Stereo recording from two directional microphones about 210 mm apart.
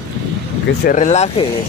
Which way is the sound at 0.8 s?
35° left (ahead or behind).